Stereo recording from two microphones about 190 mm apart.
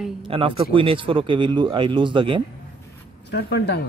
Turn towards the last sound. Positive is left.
turn(degrees=60)  # may be behind; listen again after turning